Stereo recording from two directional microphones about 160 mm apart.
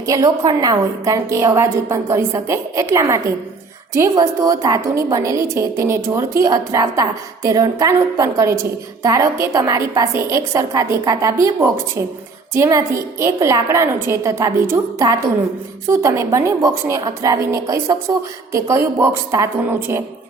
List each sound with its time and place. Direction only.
0.0 s a woman's voice: 20° right (ahead or behind)